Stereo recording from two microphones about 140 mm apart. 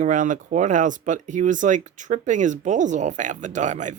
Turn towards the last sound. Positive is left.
turn(degrees=-60)  # may be behind; listen again after turning